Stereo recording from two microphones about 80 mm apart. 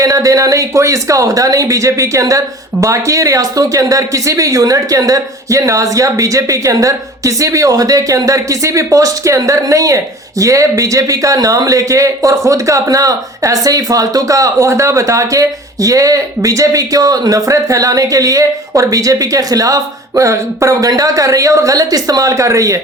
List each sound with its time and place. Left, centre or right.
0.0 s speech: right